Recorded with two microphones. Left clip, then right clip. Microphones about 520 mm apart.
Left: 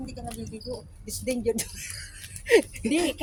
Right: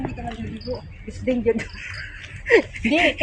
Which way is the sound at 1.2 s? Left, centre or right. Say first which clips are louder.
Right 6 dB; left.